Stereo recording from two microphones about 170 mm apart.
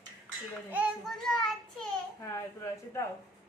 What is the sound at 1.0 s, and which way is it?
Child singing, centre (ahead or behind).